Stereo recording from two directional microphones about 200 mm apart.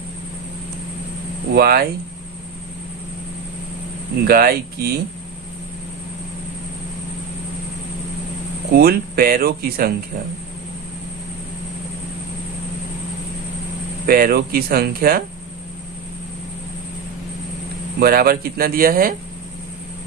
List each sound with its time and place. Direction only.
1.5 s speech: 50° right (ahead or behind)
4.3 s speech: 50° right (ahead or behind)
8.7 s speech: 50° right (ahead or behind)
14.1 s speech: 50° right (ahead or behind)
18.0 s speech: 50° right (ahead or behind)